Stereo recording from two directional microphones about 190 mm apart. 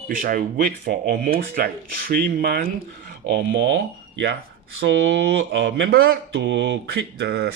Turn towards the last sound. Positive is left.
turn(degrees=-60)  # may be behind; listen again after turning